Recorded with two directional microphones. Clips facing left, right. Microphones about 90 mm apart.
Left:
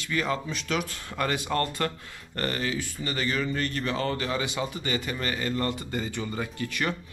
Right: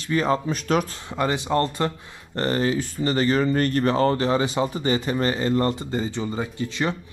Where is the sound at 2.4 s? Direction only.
35° right (ahead or behind).